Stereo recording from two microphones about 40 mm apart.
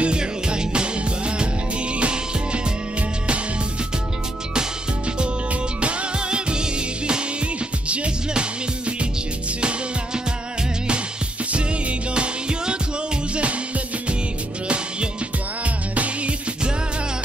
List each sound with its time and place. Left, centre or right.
0.0 s music: right
4.6 s music: right
12.1 s music: right
15.6 s music: right